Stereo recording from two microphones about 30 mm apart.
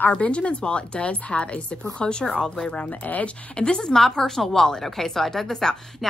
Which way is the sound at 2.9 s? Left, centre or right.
Left.